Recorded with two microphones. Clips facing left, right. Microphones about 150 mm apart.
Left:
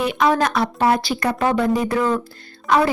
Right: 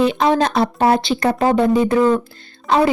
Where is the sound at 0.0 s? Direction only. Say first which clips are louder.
Right 3 dB; 25° right (ahead or behind).